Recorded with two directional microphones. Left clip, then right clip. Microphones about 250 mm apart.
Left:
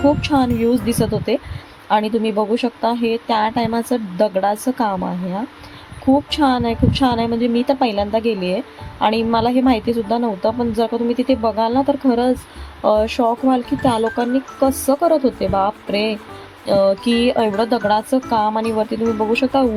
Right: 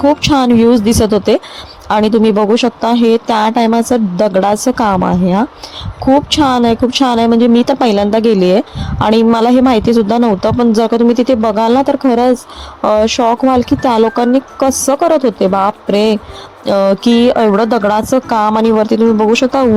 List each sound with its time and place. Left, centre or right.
0.0 s a woman's voice: right